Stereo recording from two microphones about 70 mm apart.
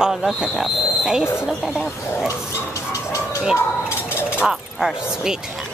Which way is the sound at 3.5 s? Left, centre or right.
Left.